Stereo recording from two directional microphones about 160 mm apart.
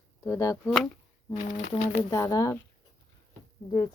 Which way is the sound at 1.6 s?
45° left (ahead or behind).